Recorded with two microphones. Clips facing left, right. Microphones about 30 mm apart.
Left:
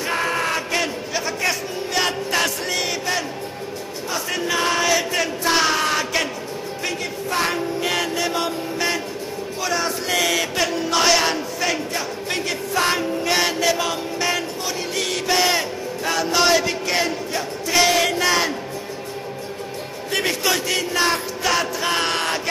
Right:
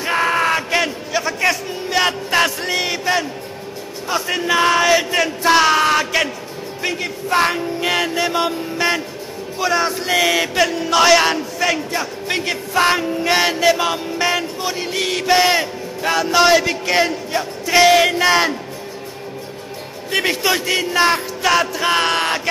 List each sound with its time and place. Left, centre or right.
0.0 s a sound: centre
2.0 s music: right
4.1 s speech: centre
5.5 s a sound: centre
6.8 s a sound: centre
9.6 s speech: centre
10.6 s a man's voice: centre
12.3 s a sound: centre
14.3 s music: centre
16.3 s speech: centre
20.1 s speech: centre
21.4 s a man's voice: centre